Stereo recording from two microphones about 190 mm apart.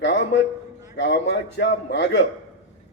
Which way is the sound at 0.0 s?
65° left (ahead or behind).